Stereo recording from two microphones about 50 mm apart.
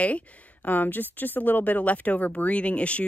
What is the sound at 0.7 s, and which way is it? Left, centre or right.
Speech, left.